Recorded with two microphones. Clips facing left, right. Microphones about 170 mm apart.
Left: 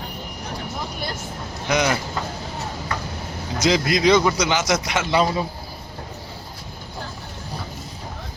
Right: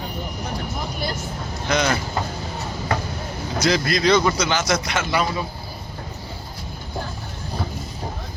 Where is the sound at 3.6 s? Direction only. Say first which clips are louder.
Left 1 dB; 20° left (ahead or behind).